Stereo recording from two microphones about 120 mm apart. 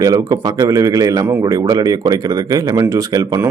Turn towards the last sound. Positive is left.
turn(degrees=-30)  # may be behind; listen again after turning